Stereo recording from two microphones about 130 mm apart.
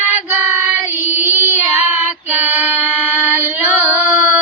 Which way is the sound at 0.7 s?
15° right (ahead or behind).